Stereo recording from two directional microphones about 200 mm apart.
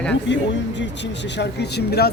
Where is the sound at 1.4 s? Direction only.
55° left (ahead or behind).